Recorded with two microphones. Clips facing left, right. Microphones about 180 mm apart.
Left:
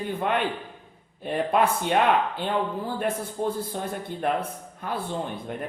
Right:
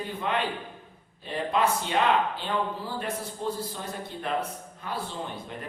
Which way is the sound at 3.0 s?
55° left (ahead or behind).